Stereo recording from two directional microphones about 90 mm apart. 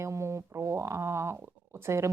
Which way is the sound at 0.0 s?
30° right (ahead or behind).